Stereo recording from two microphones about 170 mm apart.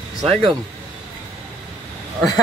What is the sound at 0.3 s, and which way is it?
Speech, 35° right (ahead or behind).